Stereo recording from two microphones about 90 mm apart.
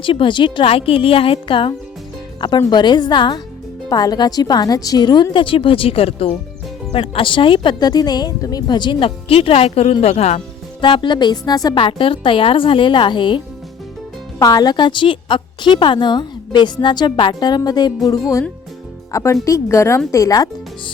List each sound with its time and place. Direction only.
0.0 s a woman's voice: 70° left (ahead or behind)
2.6 s a woman's voice: 55° left (ahead or behind)
8.6 s speech: 55° left (ahead or behind); by 10.0 s 90° left
10.8 s a woman's voice: 65° left (ahead or behind); by 11.8 s 45° left (ahead or behind)
11.8 s a woman's voice: 75° left (ahead or behind)
14.4 s a woman's voice: 50° left (ahead or behind)
19.1 s a woman's voice: 35° left (ahead or behind)